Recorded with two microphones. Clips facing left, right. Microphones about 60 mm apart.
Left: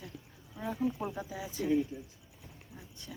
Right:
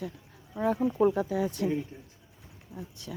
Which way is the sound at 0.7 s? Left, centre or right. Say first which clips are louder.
Right 9 dB; right.